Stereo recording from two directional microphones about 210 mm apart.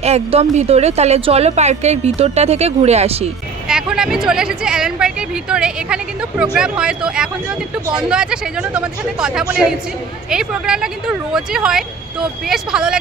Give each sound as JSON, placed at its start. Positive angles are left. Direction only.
{"t": 0.0, "sound": "a woman's voice", "side_deg": -30}
{"t": 3.6, "sound": "speech", "side_deg": -5}